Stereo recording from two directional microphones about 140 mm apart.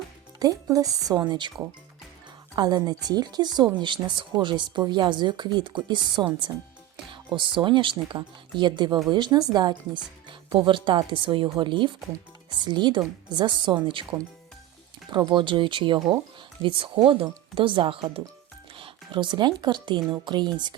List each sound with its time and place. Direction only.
0.3 s speech: 25° right (ahead or behind)